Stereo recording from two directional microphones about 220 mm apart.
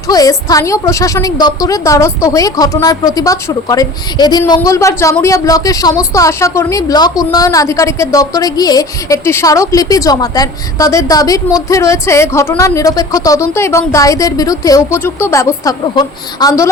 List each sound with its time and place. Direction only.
0.1 s a woman's voice: 15° left (ahead or behind)